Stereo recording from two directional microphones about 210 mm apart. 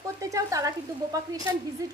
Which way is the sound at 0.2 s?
15° right (ahead or behind).